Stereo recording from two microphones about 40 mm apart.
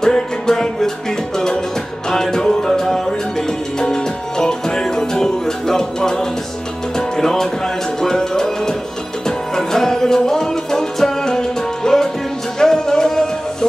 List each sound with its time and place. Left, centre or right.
0.0 s music: centre
2.0 s music: centre